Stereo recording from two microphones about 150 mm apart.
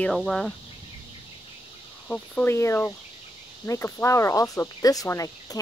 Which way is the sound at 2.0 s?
10° left (ahead or behind).